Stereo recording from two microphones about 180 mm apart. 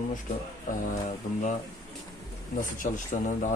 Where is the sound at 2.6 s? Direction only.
45° left (ahead or behind).